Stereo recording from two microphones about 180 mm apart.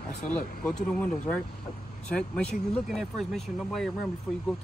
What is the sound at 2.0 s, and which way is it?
Speech, 5° left (ahead or behind).